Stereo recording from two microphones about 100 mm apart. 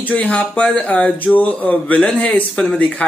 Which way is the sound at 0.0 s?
15° left (ahead or behind).